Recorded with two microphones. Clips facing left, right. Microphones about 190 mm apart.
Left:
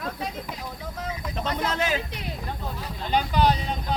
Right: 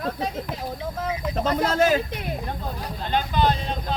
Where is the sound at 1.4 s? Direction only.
45° right (ahead or behind).